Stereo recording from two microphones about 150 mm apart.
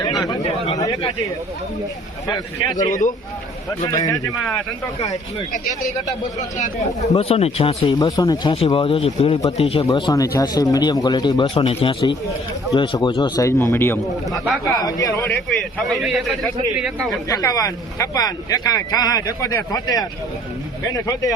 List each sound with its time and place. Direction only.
0.0 s chatter: 25° left (ahead or behind)
0.8 s speech: 25° left (ahead or behind)
2.2 s speech: 25° left (ahead or behind)
7.2 s speech: 40° left (ahead or behind)
8.1 s speech: 25° left (ahead or behind)
8.5 s speech: 40° left (ahead or behind)
9.8 s speech: 25° left (ahead or behind)
11.6 s speech: 40° left (ahead or behind); by 15.1 s 25° left (ahead or behind)
15.1 s speech: 10° left (ahead or behind)
15.8 s a man's voice: centre (ahead or behind)
17.2 s speech: 25° left (ahead or behind)